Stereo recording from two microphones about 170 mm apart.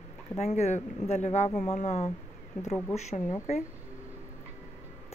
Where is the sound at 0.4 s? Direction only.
40° left (ahead or behind).